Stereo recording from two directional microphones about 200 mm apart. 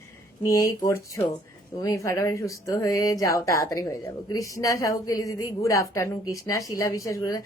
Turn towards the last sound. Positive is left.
turn(degrees=15)  # may be behind; listen again after turning